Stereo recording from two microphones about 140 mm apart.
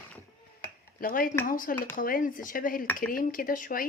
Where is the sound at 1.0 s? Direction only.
85° left.